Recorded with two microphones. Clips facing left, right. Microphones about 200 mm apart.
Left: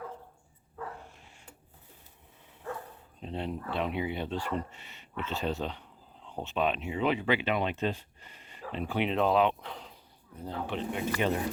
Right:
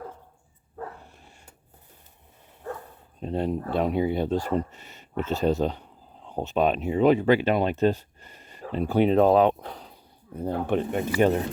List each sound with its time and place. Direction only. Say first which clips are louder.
3.2 s speech: right 9 dB; 45° right (ahead or behind)
10.4 s speech: right 9 dB; 50° right (ahead or behind)